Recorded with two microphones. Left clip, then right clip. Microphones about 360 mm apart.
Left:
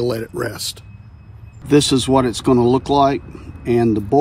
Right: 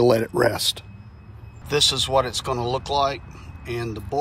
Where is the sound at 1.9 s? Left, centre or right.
Centre.